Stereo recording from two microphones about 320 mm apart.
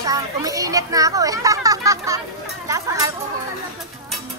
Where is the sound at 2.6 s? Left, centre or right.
Centre.